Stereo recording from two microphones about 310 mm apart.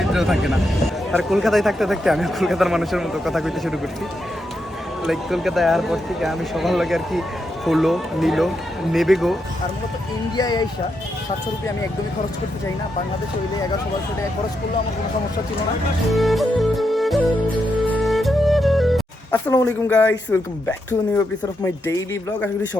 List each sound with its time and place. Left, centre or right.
0.0 s vehicle: centre
1.1 s a man's voice: centre
5.0 s a man's voice: centre
10.3 s speech: centre
16.1 s music: centre
21.6 s speech: centre